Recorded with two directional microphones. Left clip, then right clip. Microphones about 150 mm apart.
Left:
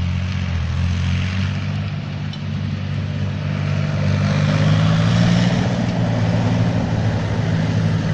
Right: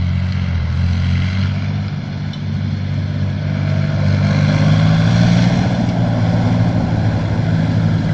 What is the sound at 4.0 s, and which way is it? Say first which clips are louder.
Vehicle: right 2 dB; 35° left (ahead or behind).